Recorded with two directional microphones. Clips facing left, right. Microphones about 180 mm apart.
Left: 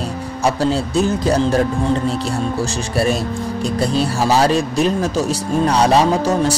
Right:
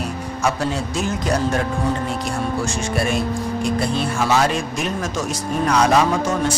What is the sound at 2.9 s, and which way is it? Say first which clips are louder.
Speech: left 3 dB; 35° left (ahead or behind).